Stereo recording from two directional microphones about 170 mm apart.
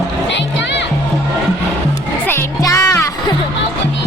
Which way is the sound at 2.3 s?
15° left (ahead or behind).